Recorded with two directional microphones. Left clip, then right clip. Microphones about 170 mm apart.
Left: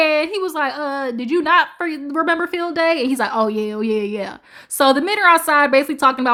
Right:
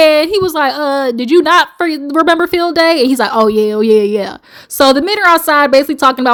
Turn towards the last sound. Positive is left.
turn(degrees=-25)  # may be behind; listen again after turning